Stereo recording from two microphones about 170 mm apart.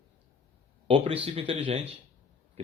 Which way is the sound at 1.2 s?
35° right (ahead or behind).